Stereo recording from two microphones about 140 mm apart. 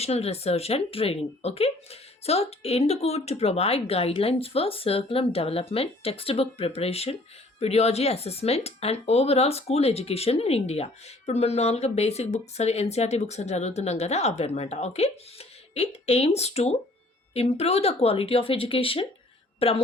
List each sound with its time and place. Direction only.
0.0 s a woman's voice: 45° left (ahead or behind)